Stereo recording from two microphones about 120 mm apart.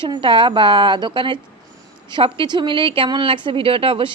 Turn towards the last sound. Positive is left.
turn(degrees=-50)  # may be behind; listen again after turning